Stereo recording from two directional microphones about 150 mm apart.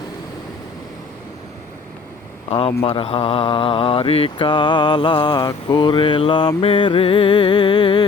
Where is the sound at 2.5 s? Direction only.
40° left (ahead or behind).